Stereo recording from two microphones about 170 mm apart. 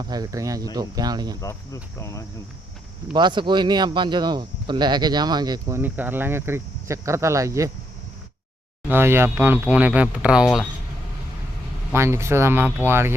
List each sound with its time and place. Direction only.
0.0 s speech: 20° right (ahead or behind)
1.4 s speech: 20° left (ahead or behind)
3.1 s speech: 25° right (ahead or behind)
8.9 s speech: 15° right (ahead or behind)
11.9 s speech: 15° right (ahead or behind)